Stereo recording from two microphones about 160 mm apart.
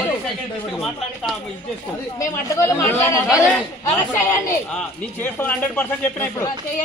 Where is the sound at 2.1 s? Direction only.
20° left (ahead or behind).